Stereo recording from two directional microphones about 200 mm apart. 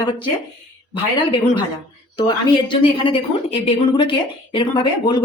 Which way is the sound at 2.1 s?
25° left (ahead or behind).